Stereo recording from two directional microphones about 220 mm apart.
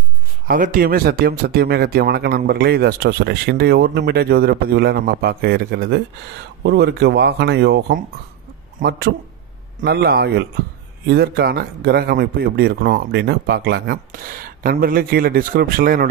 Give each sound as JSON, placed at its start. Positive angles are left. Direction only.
{"t": 0.5, "sound": "speech", "side_deg": -40}